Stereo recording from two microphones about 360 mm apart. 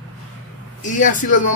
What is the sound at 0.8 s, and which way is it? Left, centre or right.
Speech, left.